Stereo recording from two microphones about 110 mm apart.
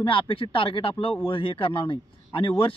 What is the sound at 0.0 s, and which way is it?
Speech, 50° left (ahead or behind).